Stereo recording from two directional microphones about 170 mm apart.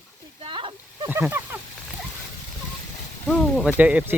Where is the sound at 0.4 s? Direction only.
30° right (ahead or behind).